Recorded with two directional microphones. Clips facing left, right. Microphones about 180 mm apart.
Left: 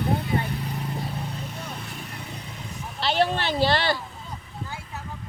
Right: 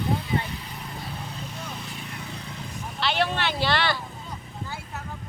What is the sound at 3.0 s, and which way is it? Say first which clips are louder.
Speech: left 2 dB; 40° left (ahead or behind).